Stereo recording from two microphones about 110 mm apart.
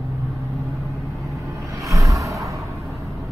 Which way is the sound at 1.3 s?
30° right (ahead or behind).